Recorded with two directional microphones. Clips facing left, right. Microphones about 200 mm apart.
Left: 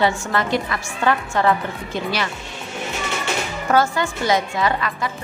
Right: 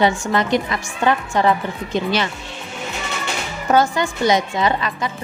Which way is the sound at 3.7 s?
20° right (ahead or behind).